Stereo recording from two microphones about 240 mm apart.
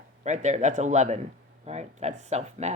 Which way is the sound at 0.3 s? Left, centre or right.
Right.